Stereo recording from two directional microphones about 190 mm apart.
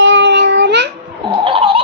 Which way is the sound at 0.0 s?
75° right (ahead or behind).